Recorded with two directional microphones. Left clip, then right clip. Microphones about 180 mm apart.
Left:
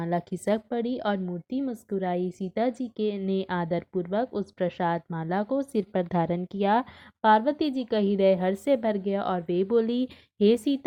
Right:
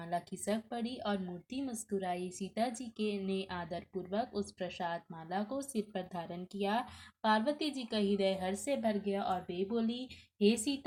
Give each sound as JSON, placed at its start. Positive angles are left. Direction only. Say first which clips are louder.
{"t": 0.0, "sound": "a woman's voice", "louder": "left 9 dB", "side_deg": 40}